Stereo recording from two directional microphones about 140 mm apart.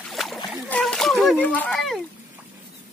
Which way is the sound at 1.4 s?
10° left (ahead or behind).